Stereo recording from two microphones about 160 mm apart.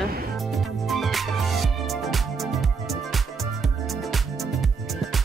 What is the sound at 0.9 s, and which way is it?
Music, centre (ahead or behind).